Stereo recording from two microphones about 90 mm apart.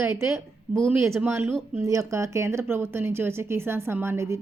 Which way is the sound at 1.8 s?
35° right (ahead or behind).